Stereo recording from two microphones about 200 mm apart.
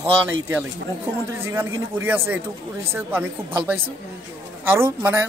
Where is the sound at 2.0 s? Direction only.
10° right (ahead or behind).